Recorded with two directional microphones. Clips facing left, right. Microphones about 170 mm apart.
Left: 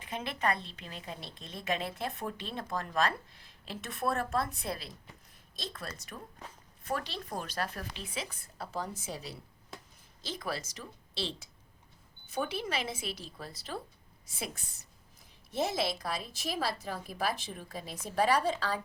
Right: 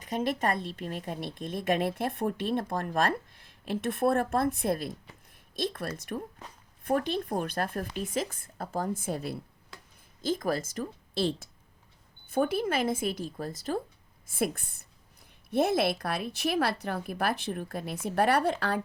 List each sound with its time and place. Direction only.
0.0 s a woman's voice: 45° right (ahead or behind)